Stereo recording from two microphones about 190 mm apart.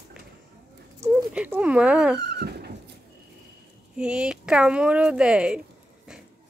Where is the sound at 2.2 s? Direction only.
60° right (ahead or behind).